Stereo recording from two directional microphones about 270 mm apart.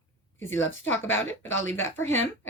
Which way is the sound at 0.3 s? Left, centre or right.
Centre.